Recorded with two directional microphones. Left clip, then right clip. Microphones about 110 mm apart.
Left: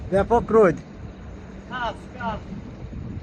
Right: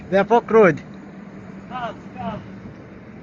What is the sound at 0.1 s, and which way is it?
Speech, 10° left (ahead or behind).